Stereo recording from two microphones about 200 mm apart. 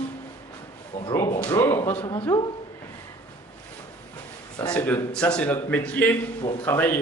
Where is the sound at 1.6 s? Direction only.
10° left (ahead or behind).